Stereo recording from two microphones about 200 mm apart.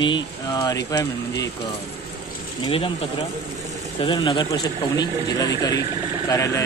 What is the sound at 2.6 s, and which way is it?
Speech, 25° left (ahead or behind).